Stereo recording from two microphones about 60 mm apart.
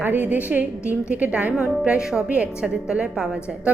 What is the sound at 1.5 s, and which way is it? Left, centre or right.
A woman's voice, centre.